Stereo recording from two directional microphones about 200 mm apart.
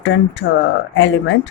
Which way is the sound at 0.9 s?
70° left (ahead or behind).